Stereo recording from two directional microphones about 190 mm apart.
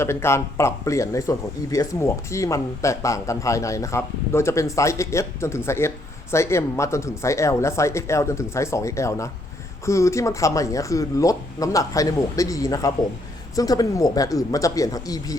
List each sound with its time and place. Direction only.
0.0 s speech: 15° left (ahead or behind)